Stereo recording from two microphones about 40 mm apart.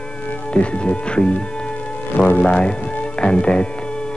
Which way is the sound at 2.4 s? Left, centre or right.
Left.